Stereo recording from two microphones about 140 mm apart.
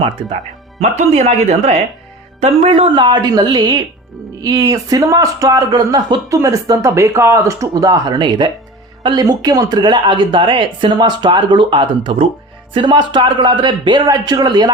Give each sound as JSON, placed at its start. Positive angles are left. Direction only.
{"t": 0.8, "sound": "speech", "side_deg": -50}